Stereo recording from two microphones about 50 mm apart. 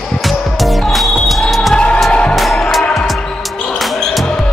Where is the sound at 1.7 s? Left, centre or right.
Left.